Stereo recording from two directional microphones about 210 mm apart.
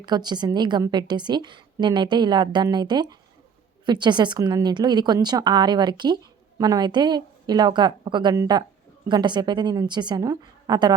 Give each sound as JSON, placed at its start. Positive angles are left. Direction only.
{"t": 0.0, "sound": "a woman's voice", "side_deg": -20}